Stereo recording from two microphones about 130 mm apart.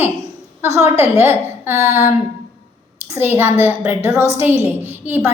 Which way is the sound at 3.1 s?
15° right (ahead or behind).